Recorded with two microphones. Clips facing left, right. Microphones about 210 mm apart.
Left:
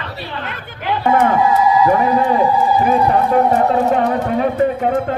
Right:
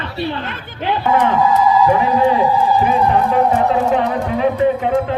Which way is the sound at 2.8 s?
45° left (ahead or behind).